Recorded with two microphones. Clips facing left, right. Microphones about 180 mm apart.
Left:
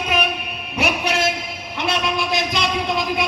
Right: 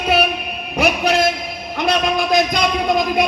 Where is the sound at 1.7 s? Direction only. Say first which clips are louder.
Right 5 dB; 45° right (ahead or behind).